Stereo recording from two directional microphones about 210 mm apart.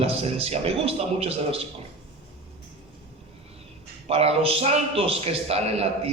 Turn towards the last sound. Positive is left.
turn(degrees=-30)  # may be behind; listen again after turning